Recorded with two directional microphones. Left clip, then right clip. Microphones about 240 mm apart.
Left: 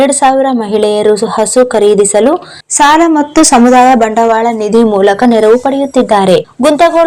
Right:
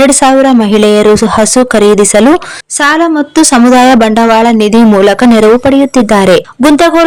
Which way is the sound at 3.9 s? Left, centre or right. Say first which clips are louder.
Right 2 dB; right.